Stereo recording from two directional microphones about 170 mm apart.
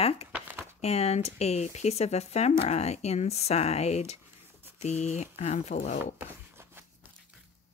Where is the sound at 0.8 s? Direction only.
35° left (ahead or behind).